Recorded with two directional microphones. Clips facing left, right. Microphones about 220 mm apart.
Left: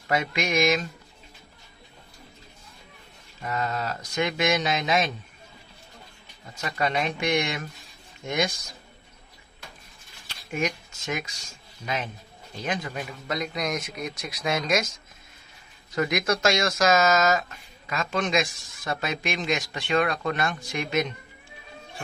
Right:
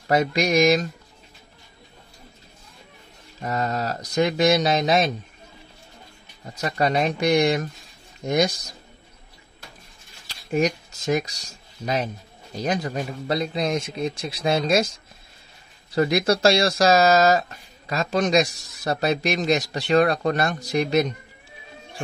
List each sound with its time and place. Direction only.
0.1 s speech: 40° right (ahead or behind)
3.3 s speech: 40° right (ahead or behind)
6.5 s speech: 40° right (ahead or behind)
10.2 s speech: 35° right (ahead or behind)